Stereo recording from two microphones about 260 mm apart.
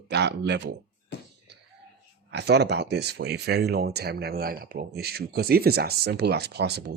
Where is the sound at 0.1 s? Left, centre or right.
Right.